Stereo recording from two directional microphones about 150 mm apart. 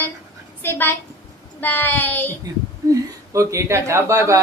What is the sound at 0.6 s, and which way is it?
Speech, 15° left (ahead or behind).